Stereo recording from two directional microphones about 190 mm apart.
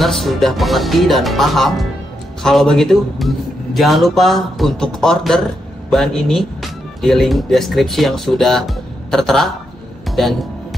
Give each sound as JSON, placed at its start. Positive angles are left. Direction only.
{"t": 0.0, "sound": "speech", "side_deg": 0}
{"t": 10.0, "sound": "music", "side_deg": 0}